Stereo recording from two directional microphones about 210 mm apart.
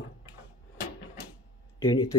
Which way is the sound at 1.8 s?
20° left (ahead or behind).